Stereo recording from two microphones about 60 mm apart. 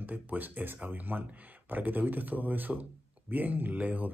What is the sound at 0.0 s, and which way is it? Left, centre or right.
Speech, right.